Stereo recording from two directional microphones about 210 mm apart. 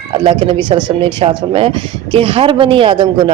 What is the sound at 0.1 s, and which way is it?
A man's voice, 25° right (ahead or behind).